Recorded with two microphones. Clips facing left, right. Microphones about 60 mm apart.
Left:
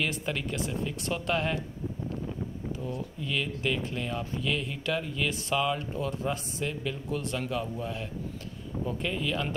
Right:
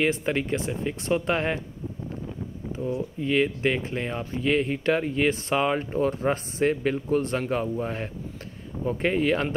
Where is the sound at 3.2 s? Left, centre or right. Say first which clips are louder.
Right 8 dB; right.